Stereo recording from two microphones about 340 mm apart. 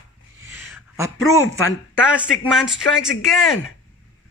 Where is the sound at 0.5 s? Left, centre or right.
Centre.